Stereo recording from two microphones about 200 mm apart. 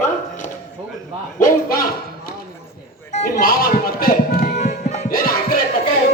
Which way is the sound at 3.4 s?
45° left (ahead or behind).